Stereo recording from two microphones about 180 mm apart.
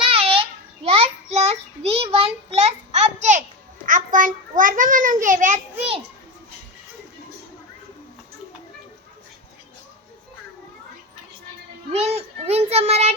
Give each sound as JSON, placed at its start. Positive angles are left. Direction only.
{"t": 0.0, "sound": "babbling", "side_deg": -30}
{"t": 0.9, "sound": "child singing", "side_deg": -35}
{"t": 3.8, "sound": "a child's voice", "side_deg": -45}
{"t": 11.9, "sound": "child singing", "side_deg": -35}